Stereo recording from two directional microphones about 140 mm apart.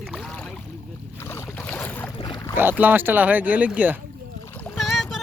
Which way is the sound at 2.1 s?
35° left (ahead or behind).